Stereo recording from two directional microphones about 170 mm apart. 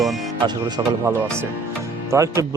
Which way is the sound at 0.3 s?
25° right (ahead or behind).